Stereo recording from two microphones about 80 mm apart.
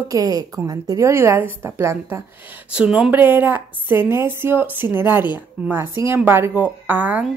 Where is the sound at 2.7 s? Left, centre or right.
Centre.